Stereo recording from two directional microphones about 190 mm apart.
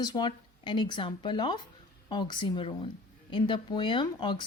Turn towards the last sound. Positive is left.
turn(degrees=25)  # may be behind; listen again after turning